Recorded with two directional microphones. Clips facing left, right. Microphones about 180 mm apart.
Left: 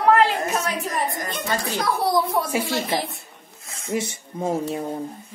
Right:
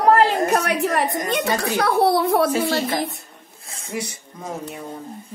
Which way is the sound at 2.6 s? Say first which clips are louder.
Right 3 dB; 45° right (ahead or behind).